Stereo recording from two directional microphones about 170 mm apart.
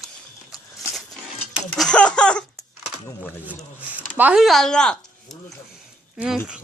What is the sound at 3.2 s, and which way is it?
Speech, 10° right (ahead or behind).